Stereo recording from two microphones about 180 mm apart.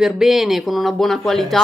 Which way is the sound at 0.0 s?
Centre (ahead or behind).